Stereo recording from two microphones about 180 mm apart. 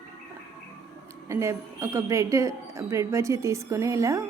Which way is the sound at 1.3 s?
15° right (ahead or behind).